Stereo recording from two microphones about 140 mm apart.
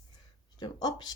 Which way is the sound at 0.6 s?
30° left (ahead or behind).